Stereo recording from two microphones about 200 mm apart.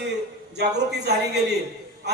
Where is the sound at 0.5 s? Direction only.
55° right (ahead or behind).